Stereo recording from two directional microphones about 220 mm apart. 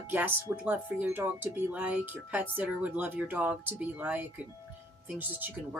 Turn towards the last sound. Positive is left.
turn(degrees=-10)  # may be behind; listen again after turning